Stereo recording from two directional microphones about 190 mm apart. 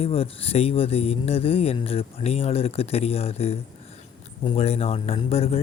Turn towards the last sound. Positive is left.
turn(degrees=30)  # may be behind; listen again after turning